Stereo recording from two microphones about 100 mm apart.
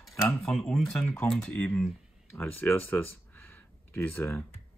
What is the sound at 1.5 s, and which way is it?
Speech, 20° left (ahead or behind).